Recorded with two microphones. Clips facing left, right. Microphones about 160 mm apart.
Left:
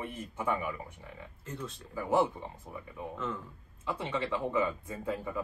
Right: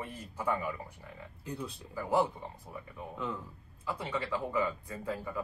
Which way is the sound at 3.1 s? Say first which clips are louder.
Even; centre (ahead or behind).